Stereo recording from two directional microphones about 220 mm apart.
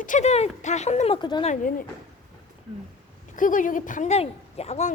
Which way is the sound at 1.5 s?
35° left (ahead or behind).